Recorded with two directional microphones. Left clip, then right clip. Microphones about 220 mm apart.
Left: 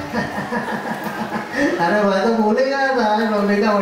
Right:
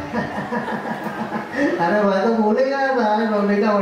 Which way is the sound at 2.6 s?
5° right (ahead or behind).